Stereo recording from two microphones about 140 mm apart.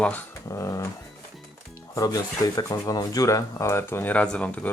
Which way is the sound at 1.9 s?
25° left (ahead or behind).